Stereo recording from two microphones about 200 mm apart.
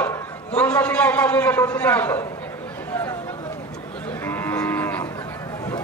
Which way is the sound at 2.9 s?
10° left (ahead or behind).